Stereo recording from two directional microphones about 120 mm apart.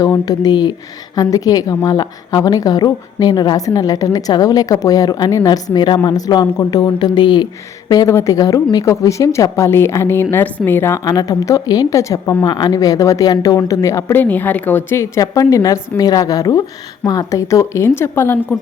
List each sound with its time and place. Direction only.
0.0 s a woman's voice: 30° left (ahead or behind)
7.9 s a woman's voice: 30° left (ahead or behind)
11.1 s a woman's voice: 30° left (ahead or behind)